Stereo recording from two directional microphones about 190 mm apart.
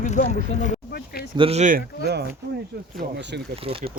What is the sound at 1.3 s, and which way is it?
Speech, 30° right (ahead or behind).